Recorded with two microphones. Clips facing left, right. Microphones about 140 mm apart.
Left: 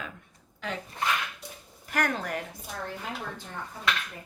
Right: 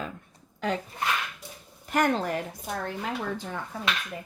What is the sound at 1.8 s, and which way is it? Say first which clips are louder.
Speech: right 5 dB; 25° right (ahead or behind).